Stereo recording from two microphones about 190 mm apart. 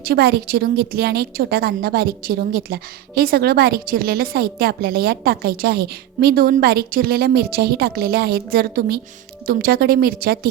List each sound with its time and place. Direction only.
0.0 s a woman's voice: 55° right (ahead or behind)